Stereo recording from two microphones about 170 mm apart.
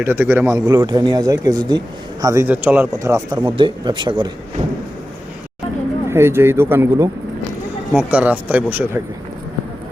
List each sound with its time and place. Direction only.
0.0 s speech: 10° right (ahead or behind); by 4.6 s 30° right (ahead or behind)
6.1 s speech: 15° right (ahead or behind)